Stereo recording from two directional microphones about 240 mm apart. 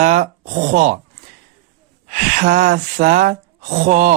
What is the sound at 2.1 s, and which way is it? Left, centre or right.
Speech, right.